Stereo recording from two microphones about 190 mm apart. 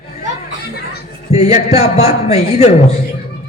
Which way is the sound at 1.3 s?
35° left (ahead or behind).